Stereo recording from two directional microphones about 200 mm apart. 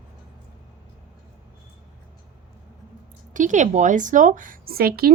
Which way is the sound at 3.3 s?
40° right (ahead or behind).